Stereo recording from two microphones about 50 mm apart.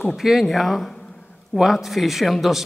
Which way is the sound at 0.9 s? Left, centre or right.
Centre.